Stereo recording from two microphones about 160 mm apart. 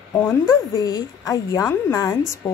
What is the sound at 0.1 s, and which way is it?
A woman's voice, 15° left (ahead or behind).